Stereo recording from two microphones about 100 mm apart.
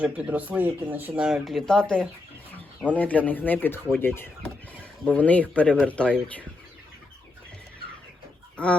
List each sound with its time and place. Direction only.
0.0 s speech: 15° right (ahead or behind)
1.2 s speech: centre (ahead or behind); by 3.8 s 20° left (ahead or behind)
4.0 s a sound: 20° left (ahead or behind)
5.0 s speech: 15° left (ahead or behind)
8.5 s chicken: 10° left (ahead or behind)